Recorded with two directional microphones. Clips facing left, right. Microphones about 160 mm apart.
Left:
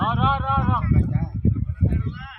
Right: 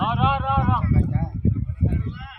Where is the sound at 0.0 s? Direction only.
10° right (ahead or behind).